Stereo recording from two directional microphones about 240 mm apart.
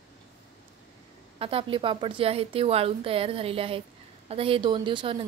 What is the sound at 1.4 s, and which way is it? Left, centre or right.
A woman's voice, right.